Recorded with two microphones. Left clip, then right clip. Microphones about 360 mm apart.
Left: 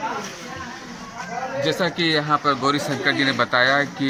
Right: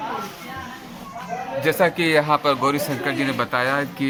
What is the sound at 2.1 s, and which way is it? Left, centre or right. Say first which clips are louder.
Speech: right 2 dB; centre.